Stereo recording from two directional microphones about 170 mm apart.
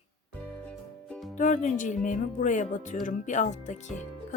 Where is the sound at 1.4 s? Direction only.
50° left (ahead or behind).